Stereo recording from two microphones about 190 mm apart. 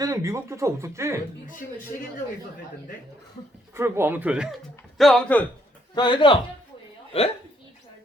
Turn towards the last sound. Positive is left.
turn(degrees=30)  # may be behind; listen again after turning